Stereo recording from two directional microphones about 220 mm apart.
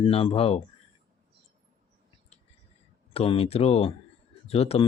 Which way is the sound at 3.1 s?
25° left (ahead or behind).